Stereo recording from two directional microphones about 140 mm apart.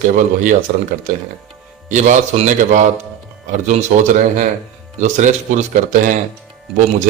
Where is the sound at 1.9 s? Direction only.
65° right (ahead or behind).